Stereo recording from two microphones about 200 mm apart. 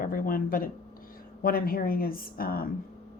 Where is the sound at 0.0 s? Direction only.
45° left (ahead or behind).